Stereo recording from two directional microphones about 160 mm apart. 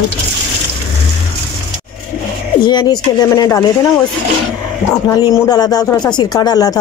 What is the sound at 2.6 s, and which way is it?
Speech, 25° left (ahead or behind).